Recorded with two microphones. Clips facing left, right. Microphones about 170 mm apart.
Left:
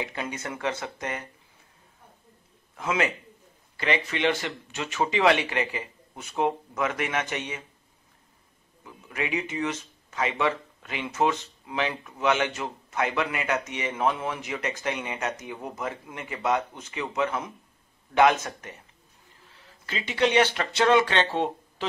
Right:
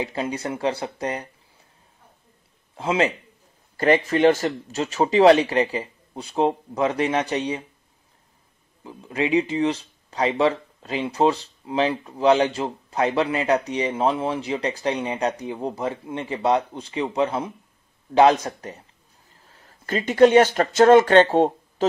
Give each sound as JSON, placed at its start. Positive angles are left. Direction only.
{"t": 0.0, "sound": "speech", "side_deg": -30}
{"t": 2.7, "sound": "a man's voice", "side_deg": -30}
{"t": 3.7, "sound": "speech", "side_deg": -45}
{"t": 8.8, "sound": "speech", "side_deg": -30}